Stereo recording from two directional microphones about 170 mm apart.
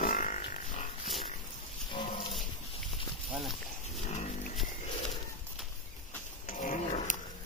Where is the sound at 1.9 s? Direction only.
30° left (ahead or behind).